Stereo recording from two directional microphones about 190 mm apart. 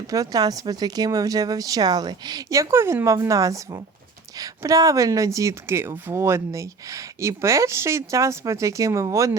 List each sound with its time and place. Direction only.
0.1 s a woman's voice: 20° right (ahead or behind)